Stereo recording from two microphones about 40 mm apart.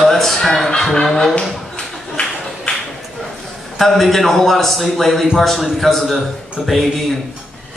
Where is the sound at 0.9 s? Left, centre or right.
Centre.